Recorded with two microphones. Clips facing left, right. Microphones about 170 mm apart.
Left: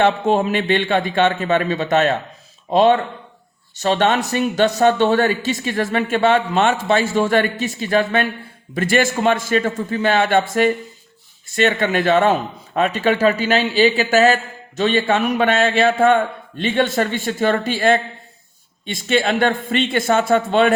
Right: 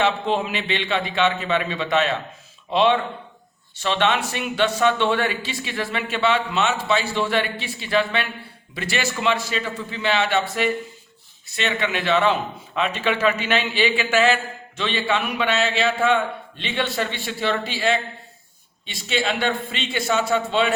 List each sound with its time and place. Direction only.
0.0 s a man's voice: 45° left (ahead or behind)